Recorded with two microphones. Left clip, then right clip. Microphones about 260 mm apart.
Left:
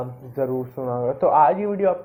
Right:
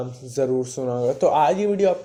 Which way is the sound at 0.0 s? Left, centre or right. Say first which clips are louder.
Right 2 dB; right.